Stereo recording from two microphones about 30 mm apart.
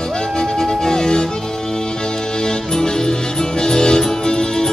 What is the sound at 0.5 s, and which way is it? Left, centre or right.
Music, centre.